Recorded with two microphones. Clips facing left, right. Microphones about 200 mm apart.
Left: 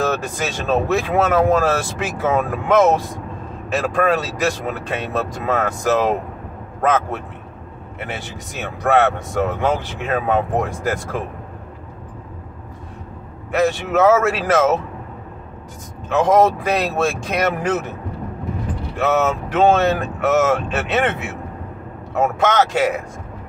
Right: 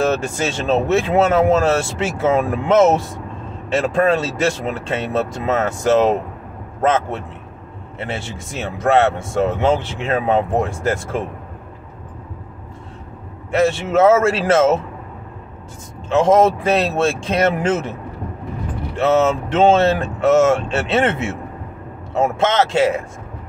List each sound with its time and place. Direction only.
0.5 s speech: 25° right (ahead or behind)
13.5 s speech: 25° right (ahead or behind)
16.1 s speech: 25° right (ahead or behind)
18.9 s speech: 25° right (ahead or behind)